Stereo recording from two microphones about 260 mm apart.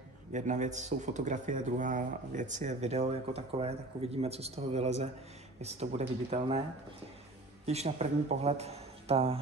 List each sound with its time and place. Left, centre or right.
0.3 s speech: right
7.6 s speech: right